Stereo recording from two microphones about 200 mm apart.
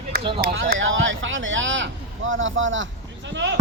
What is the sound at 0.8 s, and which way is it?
Speech, 70° right (ahead or behind).